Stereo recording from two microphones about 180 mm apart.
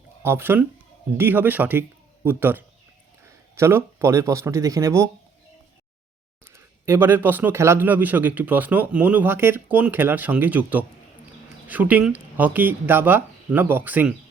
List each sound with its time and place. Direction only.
0.2 s speech: 10° right (ahead or behind)
6.5 s speech: 15° right (ahead or behind)